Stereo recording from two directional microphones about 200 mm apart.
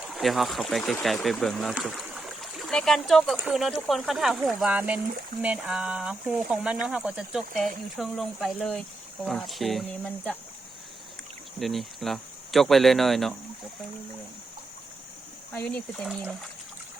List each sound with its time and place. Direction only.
0.1 s speech: centre (ahead or behind)
11.6 s speech: centre (ahead or behind)
15.5 s speech: 5° left (ahead or behind)